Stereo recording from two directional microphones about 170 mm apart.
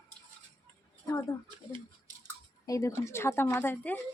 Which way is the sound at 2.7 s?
20° left (ahead or behind).